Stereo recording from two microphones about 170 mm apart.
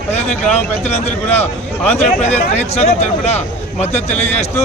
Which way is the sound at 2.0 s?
40° left (ahead or behind).